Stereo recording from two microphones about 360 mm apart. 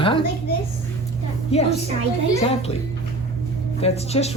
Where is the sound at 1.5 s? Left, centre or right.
Centre.